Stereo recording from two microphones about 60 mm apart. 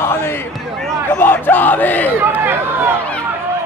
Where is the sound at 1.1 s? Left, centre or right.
Left.